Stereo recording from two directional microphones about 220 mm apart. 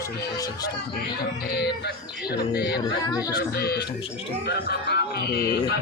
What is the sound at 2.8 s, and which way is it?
Speech, 15° left (ahead or behind).